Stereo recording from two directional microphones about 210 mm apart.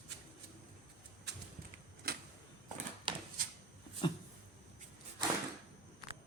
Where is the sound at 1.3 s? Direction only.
55° right (ahead or behind).